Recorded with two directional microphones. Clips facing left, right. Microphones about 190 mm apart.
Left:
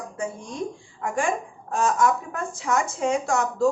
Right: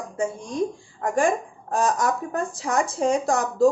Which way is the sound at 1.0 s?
40° right (ahead or behind).